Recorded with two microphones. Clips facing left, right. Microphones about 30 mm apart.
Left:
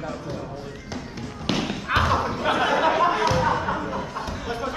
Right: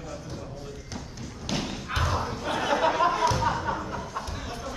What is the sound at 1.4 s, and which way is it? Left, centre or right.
Thump, left.